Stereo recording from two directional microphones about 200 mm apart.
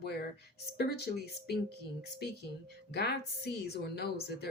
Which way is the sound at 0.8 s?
55° left (ahead or behind).